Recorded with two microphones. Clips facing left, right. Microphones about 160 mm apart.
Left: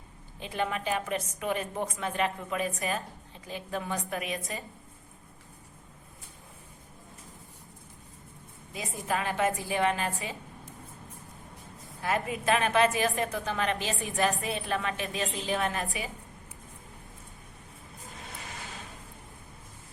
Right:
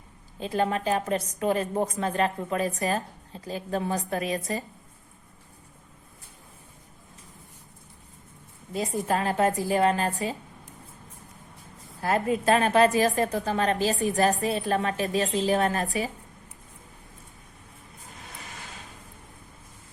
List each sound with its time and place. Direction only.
0.3 s a woman's voice: 35° right (ahead or behind)
9.0 s a woman's voice: 35° right (ahead or behind)
12.0 s a woman's voice: 35° right (ahead or behind)